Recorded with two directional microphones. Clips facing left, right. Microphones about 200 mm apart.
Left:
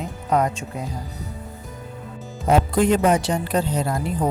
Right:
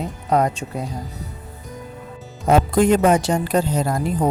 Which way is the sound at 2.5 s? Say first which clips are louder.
Right 2 dB; 45° right (ahead or behind).